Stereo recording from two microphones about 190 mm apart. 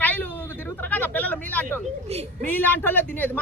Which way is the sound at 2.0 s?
35° right (ahead or behind).